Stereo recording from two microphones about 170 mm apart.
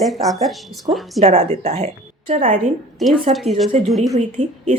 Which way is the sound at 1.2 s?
40° right (ahead or behind).